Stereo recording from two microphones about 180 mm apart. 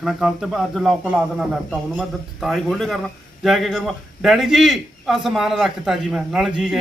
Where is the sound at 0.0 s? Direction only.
Centre (ahead or behind).